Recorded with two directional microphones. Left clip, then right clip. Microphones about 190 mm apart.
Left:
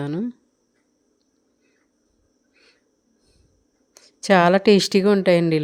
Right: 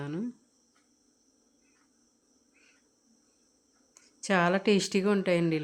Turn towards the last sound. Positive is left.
turn(degrees=35)  # may be behind; listen again after turning